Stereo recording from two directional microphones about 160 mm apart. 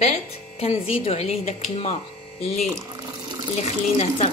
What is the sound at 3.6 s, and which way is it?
Speech, 45° left (ahead or behind).